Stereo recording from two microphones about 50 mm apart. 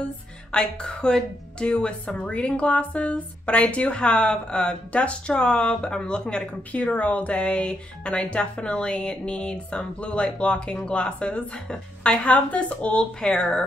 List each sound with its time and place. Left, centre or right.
0.5 s a woman's voice: centre